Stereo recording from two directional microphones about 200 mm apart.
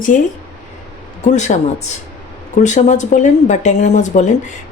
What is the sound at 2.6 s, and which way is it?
A woman's voice, 35° left (ahead or behind).